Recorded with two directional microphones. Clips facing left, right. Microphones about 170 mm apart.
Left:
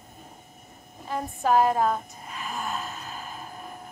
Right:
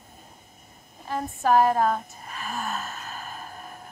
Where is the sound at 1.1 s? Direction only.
15° left (ahead or behind).